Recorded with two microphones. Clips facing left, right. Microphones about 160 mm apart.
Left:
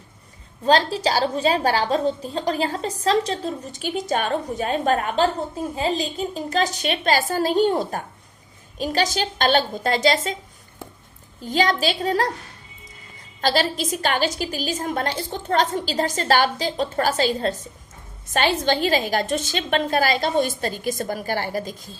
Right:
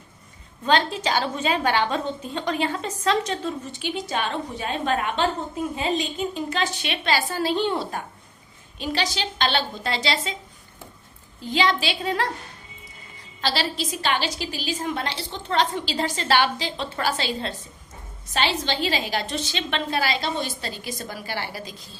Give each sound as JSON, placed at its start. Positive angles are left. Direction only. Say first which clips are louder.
{"t": 0.6, "sound": "a woman's voice", "louder": "left 3 dB", "side_deg": 35}
{"t": 11.3, "sound": "a woman's voice", "louder": "left 2 dB", "side_deg": 45}
{"t": 13.4, "sound": "a woman's voice", "louder": "left 5 dB", "side_deg": 45}